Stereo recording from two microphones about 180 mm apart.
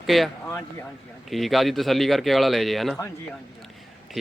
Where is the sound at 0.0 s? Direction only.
Centre (ahead or behind).